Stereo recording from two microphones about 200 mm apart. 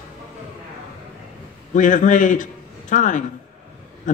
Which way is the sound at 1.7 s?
40° left (ahead or behind).